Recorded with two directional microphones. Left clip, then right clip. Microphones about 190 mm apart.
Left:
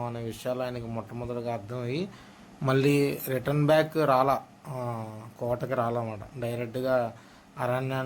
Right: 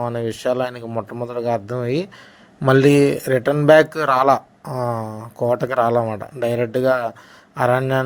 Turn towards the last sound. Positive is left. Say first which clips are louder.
# right 12 dB
turn(degrees=-40)  # may be behind; listen again after turning